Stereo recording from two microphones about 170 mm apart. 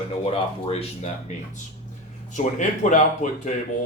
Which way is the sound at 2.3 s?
45° left (ahead or behind).